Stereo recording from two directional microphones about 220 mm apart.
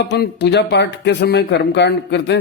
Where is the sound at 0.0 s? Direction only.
50° left (ahead or behind).